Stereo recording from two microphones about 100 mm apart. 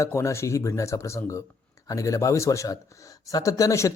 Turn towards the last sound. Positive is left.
turn(degrees=30)  # may be behind; listen again after turning